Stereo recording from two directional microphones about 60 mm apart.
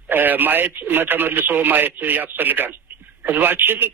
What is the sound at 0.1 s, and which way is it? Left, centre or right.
Speech, right.